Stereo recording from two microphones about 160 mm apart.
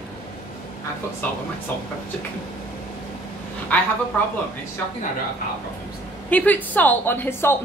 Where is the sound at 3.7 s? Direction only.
10° left (ahead or behind).